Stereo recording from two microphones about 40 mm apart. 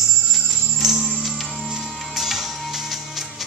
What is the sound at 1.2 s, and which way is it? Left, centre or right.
Music, centre.